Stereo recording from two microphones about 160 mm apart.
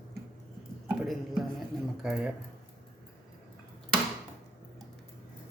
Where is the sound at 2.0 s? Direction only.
5° right (ahead or behind).